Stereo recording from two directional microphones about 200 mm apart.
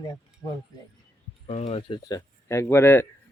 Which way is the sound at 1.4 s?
30° left (ahead or behind).